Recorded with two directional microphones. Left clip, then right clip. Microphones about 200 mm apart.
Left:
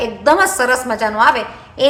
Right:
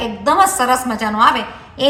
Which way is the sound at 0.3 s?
45° left (ahead or behind).